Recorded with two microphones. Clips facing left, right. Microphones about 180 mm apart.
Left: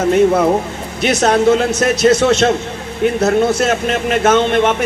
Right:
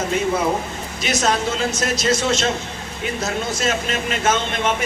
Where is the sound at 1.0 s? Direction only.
60° left (ahead or behind).